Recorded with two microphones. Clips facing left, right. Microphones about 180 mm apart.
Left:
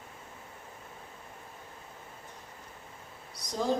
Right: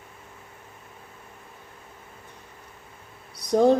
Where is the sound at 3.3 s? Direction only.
60° right (ahead or behind).